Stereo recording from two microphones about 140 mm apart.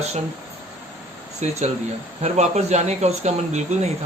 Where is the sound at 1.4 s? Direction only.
55° right (ahead or behind).